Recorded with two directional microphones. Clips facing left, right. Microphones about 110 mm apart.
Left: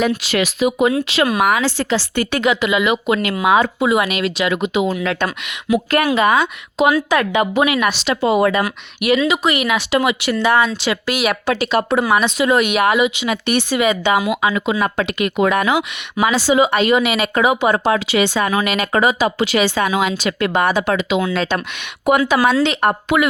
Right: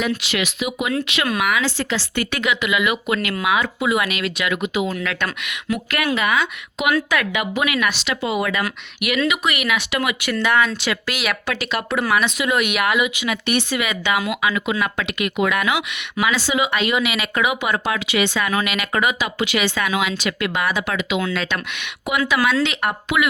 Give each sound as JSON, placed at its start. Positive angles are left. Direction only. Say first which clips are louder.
{"t": 0.2, "sound": "speech", "louder": "left 7 dB", "side_deg": 40}
{"t": 11.4, "sound": "speech", "louder": "left 7 dB", "side_deg": 30}